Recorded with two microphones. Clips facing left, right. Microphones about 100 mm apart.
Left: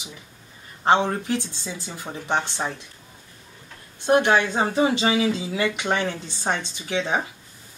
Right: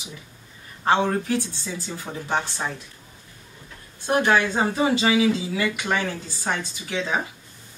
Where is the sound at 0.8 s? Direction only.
20° left (ahead or behind).